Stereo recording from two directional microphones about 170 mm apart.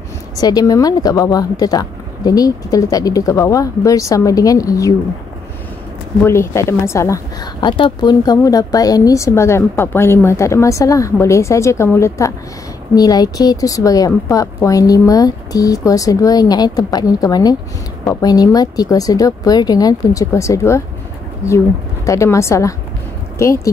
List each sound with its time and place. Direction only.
0.4 s speech: 20° left (ahead or behind)
6.2 s speech: 15° left (ahead or behind)
7.6 s speech: 30° left (ahead or behind)
22.0 s speech: 20° left (ahead or behind)